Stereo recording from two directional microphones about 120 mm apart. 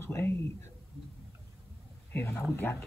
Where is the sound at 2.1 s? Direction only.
15° left (ahead or behind).